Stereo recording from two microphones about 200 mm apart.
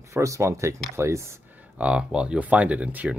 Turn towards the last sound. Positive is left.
turn(degrees=-5)  # may be behind; listen again after turning